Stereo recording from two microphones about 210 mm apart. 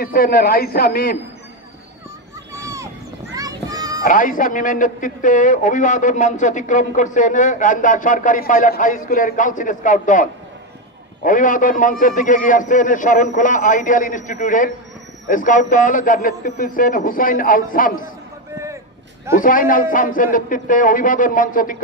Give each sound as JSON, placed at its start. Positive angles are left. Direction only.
{"t": 0.0, "sound": "a man's voice", "side_deg": 45}
{"t": 2.5, "sound": "a sound", "side_deg": -15}
{"t": 3.3, "sound": "children playing", "side_deg": -15}
{"t": 4.0, "sound": "a man's voice", "side_deg": 40}
{"t": 18.5, "sound": "a sound", "side_deg": -15}
{"t": 19.3, "sound": "a man's voice", "side_deg": 40}